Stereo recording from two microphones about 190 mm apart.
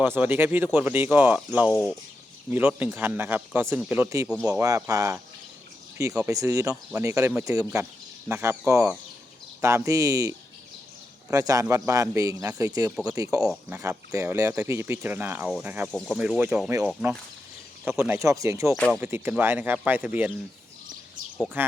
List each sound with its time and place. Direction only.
0.0 s speech: 10° right (ahead or behind)
1.7 s speech: 5° left (ahead or behind)
2.5 s speech: 10° right (ahead or behind)
18.7 s speech: centre (ahead or behind)
18.9 s speech: 10° right (ahead or behind)